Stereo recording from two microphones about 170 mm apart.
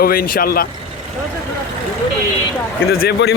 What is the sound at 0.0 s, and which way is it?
Speech, 60° left (ahead or behind).